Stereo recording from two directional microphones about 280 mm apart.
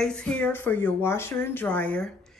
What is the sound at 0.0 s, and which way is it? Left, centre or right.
Speech, centre.